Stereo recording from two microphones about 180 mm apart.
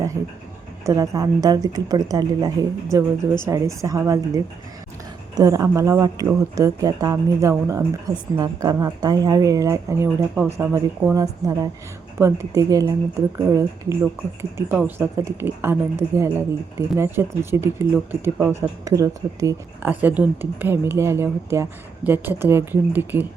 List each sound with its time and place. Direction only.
0.9 s a woman's voice: 20° right (ahead or behind)